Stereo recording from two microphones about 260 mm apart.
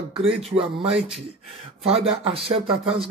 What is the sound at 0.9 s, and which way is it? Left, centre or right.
Speech, centre.